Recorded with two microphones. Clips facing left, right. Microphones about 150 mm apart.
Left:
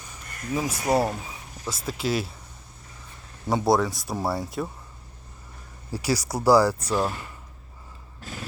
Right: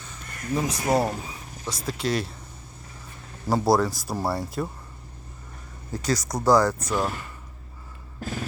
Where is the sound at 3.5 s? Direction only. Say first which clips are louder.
Right 1 dB; centre (ahead or behind).